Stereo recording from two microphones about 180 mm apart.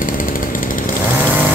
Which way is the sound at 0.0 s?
50° left (ahead or behind).